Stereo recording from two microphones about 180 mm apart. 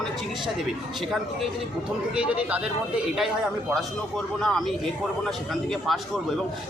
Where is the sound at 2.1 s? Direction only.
5° right (ahead or behind).